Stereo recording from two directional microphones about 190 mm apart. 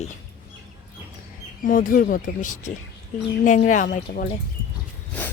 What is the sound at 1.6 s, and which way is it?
Speech, 45° left (ahead or behind).